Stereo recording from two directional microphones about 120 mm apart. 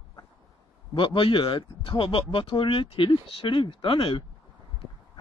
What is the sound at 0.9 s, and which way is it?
Speech, 45° left (ahead or behind).